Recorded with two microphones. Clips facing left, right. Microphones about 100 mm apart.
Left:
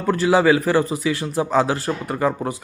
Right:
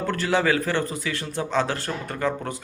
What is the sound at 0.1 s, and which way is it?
Speech, 30° left (ahead or behind).